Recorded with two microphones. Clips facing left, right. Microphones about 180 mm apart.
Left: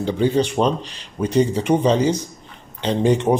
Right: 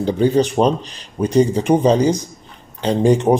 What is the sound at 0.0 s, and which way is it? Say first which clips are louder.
Speech: right 3 dB; 40° right (ahead or behind).